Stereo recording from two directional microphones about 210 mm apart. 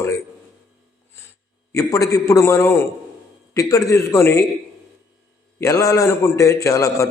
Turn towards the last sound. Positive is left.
turn(degrees=15)  # may be behind; listen again after turning